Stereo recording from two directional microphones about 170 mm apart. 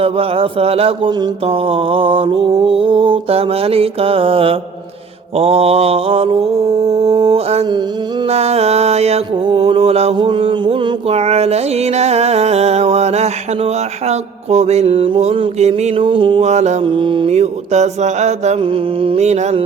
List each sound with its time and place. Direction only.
0.0 s mantra: 35° right (ahead or behind)